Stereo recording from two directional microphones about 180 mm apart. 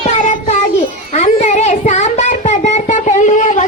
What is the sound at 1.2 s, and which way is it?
Child singing, 40° left (ahead or behind).